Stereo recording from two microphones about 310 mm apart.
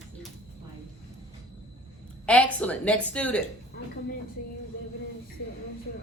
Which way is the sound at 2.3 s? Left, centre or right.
Centre.